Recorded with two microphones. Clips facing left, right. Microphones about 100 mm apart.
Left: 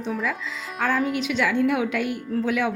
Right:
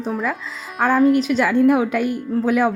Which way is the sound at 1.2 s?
45° right (ahead or behind).